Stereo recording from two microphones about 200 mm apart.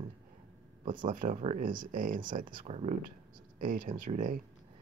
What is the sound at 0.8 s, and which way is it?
Speech, 40° right (ahead or behind).